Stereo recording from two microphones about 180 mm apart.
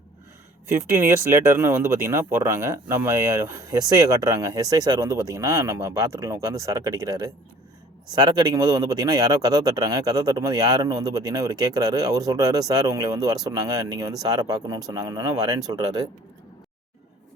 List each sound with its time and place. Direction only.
1.3 s speech: 15° right (ahead or behind)